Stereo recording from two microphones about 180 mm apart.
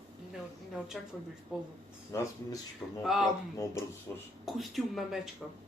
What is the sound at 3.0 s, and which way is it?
Speech, centre (ahead or behind).